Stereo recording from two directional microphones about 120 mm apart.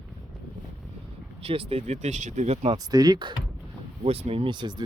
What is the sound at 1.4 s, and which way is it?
Speech, 55° right (ahead or behind).